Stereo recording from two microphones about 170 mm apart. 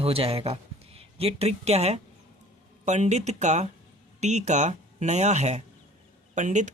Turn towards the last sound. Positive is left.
turn(degrees=-45)  # may be behind; listen again after turning